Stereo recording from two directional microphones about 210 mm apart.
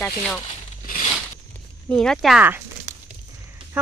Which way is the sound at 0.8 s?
40° left (ahead or behind).